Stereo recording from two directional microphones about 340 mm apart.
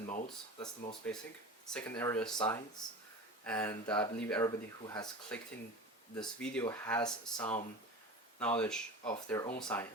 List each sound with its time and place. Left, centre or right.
0.1 s speech: centre
1.7 s speech: centre